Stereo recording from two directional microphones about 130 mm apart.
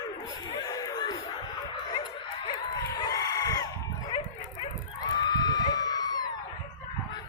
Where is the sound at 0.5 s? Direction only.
30° left (ahead or behind).